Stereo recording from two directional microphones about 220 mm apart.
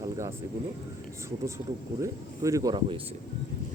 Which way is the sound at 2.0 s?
15° right (ahead or behind).